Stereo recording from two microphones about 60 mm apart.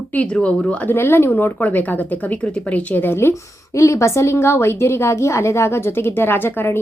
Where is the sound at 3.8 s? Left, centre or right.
Left.